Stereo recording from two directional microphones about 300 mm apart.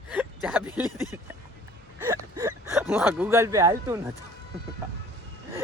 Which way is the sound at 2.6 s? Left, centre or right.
Centre.